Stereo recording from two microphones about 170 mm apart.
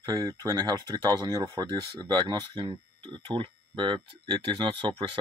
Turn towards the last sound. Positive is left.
turn(degrees=-30)  # may be behind; listen again after turning